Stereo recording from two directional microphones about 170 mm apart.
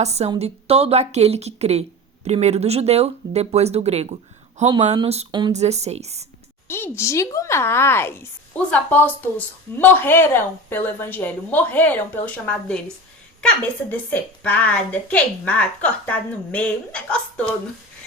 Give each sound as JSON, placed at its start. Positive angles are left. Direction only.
{"t": 0.0, "sound": "speech", "side_deg": -40}
{"t": 5.3, "sound": "speech", "side_deg": -25}
{"t": 5.5, "sound": "speech", "side_deg": -40}
{"t": 6.7, "sound": "a woman's voice", "side_deg": 15}
{"t": 13.9, "sound": "a woman's voice", "side_deg": 10}